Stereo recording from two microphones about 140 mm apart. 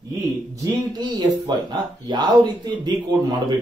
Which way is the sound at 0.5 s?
25° right (ahead or behind).